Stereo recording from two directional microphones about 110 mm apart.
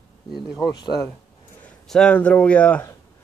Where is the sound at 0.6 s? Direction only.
40° left (ahead or behind).